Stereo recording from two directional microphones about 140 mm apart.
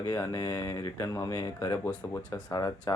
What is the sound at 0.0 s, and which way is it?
Speech, 25° left (ahead or behind).